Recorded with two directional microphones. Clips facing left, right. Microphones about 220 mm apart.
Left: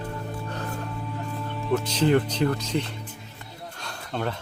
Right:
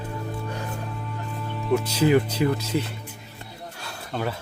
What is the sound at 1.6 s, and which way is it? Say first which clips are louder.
Speech: right 2 dB; 5° right (ahead or behind).